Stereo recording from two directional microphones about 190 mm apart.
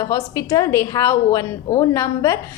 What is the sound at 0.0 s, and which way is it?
A woman's voice, 20° left (ahead or behind).